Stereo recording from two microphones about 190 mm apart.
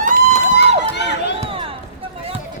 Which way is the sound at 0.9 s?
65° left (ahead or behind).